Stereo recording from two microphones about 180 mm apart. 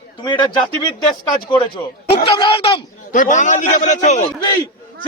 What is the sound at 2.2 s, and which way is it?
Speech, 25° left (ahead or behind).